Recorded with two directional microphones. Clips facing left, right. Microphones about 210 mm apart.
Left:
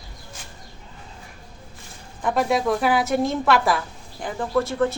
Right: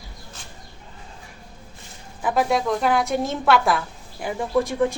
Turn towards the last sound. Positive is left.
turn(degrees=-15)  # may be behind; listen again after turning